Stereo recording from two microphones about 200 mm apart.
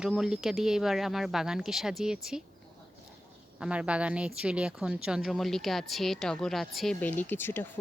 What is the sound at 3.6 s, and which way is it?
Speech, 5° right (ahead or behind).